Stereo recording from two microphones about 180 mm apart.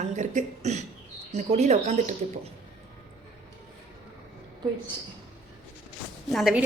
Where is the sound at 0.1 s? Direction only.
40° right (ahead or behind).